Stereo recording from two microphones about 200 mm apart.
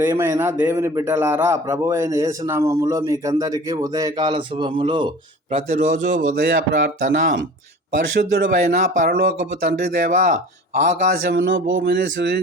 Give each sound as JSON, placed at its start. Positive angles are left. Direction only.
{"t": 0.0, "sound": "speech", "side_deg": -10}
{"t": 6.3, "sound": "speech", "side_deg": -55}
{"t": 11.3, "sound": "speech", "side_deg": -60}